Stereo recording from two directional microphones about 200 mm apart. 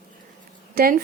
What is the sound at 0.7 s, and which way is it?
Speech, 50° right (ahead or behind).